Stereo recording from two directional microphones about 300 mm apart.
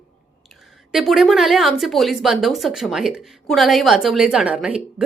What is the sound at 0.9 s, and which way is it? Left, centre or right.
A woman's voice, centre.